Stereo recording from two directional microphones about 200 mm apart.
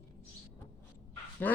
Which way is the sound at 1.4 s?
10° left (ahead or behind).